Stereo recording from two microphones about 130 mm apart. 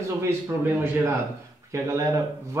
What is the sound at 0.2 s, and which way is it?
Speech, 20° right (ahead or behind).